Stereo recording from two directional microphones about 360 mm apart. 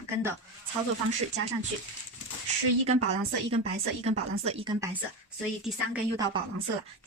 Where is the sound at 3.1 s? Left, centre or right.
Centre.